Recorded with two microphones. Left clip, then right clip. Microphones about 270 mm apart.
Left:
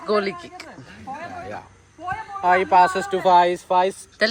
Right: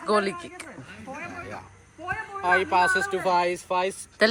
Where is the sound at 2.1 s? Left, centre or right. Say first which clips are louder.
Left 4 dB; left.